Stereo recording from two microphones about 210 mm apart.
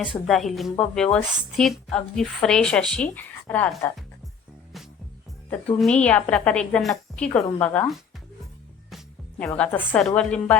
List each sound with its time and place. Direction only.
0.3 s a woman's voice: centre (ahead or behind)
5.5 s a woman's voice: 5° left (ahead or behind)
9.4 s a woman's voice: 5° left (ahead or behind)